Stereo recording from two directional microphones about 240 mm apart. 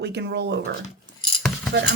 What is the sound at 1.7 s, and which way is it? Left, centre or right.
Speech, right.